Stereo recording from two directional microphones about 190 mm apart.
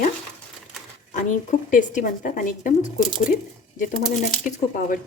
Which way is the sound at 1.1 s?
40° left (ahead or behind).